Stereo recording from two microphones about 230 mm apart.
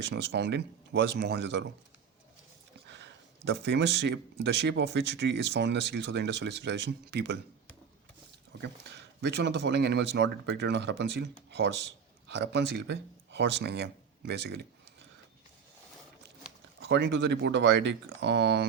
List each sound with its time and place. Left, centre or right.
0.0 s speech: right
2.9 s speech: right
9.2 s speech: right
12.3 s speech: right
16.8 s speech: right